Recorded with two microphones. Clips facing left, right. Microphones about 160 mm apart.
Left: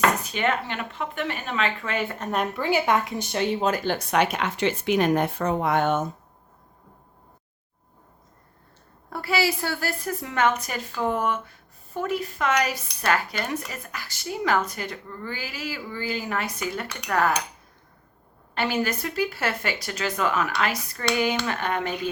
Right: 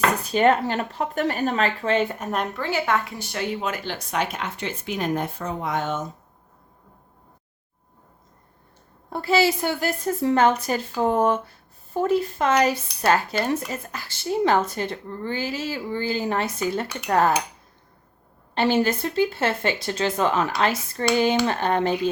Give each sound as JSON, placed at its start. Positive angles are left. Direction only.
{"t": 0.3, "sound": "speech", "side_deg": -35}
{"t": 2.1, "sound": "a woman's voice", "side_deg": -10}
{"t": 2.4, "sound": "speech", "side_deg": 10}
{"t": 3.8, "sound": "speech", "side_deg": 60}
{"t": 9.0, "sound": "speech", "side_deg": -25}
{"t": 18.5, "sound": "speech", "side_deg": -30}